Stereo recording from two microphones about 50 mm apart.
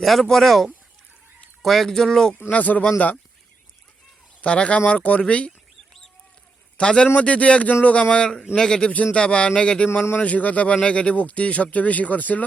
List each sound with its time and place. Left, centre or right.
0.0 s speech: centre
2.5 s speech: left
4.4 s speech: left
6.7 s a man's voice: left
8.1 s speech: centre
9.9 s speech: left
10.2 s speech: left